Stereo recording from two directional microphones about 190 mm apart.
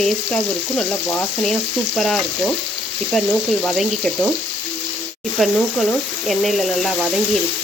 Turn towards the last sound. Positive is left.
turn(degrees=0)  # may be behind; listen again after turning